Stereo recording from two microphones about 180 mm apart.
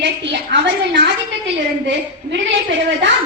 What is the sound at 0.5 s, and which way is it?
Speech, 70° right (ahead or behind).